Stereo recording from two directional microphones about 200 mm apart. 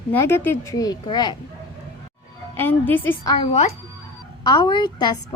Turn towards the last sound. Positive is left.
turn(degrees=20)  # may be behind; listen again after turning